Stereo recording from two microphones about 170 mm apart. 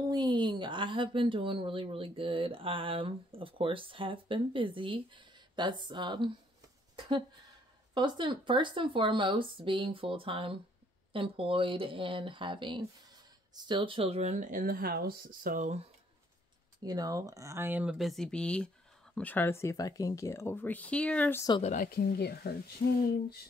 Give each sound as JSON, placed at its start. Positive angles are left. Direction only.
{"t": 0.1, "sound": "speech", "side_deg": -25}
{"t": 16.8, "sound": "speech", "side_deg": -20}
{"t": 21.6, "sound": "speech", "side_deg": 55}